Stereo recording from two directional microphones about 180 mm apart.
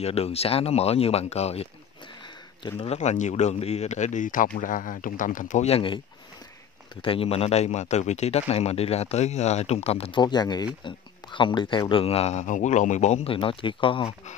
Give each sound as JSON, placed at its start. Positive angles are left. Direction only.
{"t": 0.0, "sound": "a man's voice", "side_deg": 35}
{"t": 7.0, "sound": "speech", "side_deg": 30}